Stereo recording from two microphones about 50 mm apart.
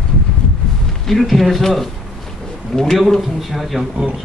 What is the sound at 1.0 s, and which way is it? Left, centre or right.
Speech, centre.